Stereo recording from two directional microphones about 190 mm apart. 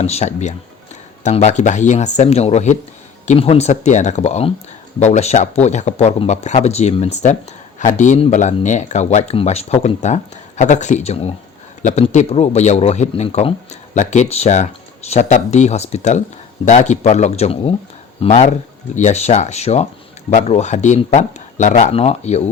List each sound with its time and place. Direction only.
0.0 s speech: 35° left (ahead or behind)